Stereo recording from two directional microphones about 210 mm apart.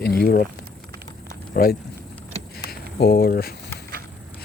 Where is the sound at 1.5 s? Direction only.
50° left (ahead or behind).